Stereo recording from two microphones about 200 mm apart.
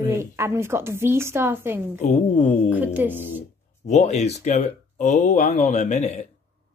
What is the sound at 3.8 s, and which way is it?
Speech, 35° left (ahead or behind).